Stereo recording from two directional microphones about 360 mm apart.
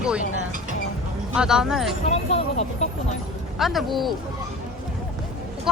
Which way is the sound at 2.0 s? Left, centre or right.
Centre.